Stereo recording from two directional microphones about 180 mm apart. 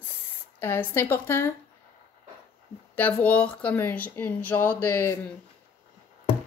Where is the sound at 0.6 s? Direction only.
15° left (ahead or behind).